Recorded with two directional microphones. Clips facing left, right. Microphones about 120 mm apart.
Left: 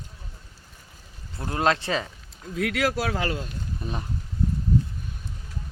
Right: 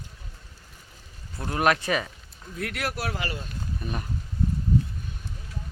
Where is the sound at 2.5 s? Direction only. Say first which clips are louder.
Left 7 dB; 90° left.